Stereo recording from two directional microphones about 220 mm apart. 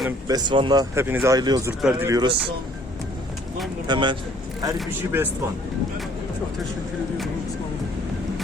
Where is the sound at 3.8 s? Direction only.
20° right (ahead or behind).